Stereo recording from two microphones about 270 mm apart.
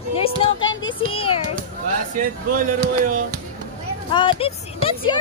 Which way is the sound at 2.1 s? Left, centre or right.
Right.